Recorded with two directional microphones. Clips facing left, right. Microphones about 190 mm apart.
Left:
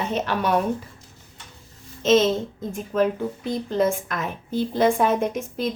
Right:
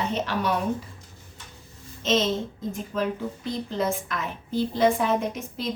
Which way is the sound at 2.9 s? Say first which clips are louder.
Left 7 dB; 50° left (ahead or behind).